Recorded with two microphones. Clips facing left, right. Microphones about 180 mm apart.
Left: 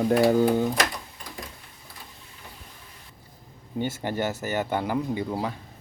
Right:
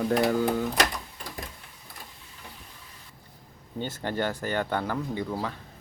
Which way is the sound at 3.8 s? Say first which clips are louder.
Left 2 dB; 10° left (ahead or behind).